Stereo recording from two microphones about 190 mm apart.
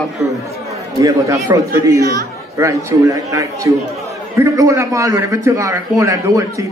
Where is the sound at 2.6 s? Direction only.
15° right (ahead or behind).